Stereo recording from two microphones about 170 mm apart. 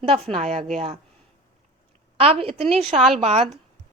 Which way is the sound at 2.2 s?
35° right (ahead or behind).